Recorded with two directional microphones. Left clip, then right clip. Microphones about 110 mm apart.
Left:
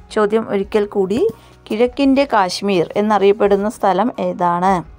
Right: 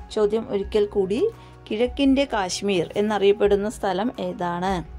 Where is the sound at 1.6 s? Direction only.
35° left (ahead or behind).